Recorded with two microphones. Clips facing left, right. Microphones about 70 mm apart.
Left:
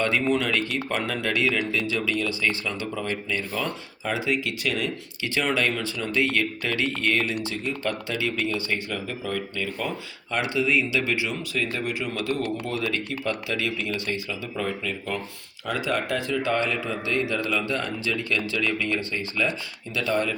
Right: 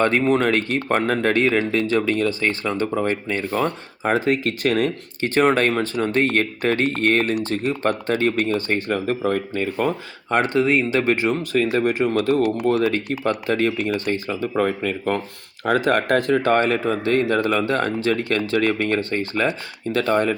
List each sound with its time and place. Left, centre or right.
0.0 s speech: right